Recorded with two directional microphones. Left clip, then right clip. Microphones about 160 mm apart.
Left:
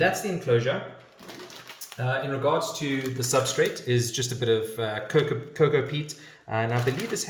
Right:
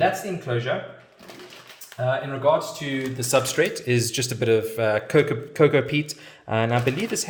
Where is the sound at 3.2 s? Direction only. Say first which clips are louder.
Right 3 dB; 65° right (ahead or behind).